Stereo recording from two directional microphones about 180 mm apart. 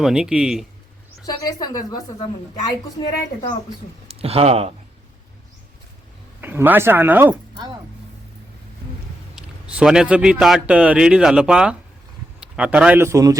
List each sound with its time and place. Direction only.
0.0 s a man's voice: 5° right (ahead or behind)
1.2 s a woman's voice: 20° left (ahead or behind)
4.2 s speech: 35° right (ahead or behind)
6.4 s speech: 10° right (ahead or behind)
7.5 s speech: 25° right (ahead or behind)
9.3 s a man's voice: 5° right (ahead or behind)